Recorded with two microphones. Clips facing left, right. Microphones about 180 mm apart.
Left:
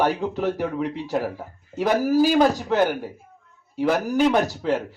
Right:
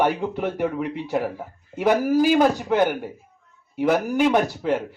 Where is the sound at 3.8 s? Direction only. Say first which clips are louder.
Even; 10° right (ahead or behind).